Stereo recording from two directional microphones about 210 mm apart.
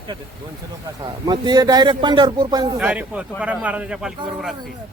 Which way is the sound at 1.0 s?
20° right (ahead or behind).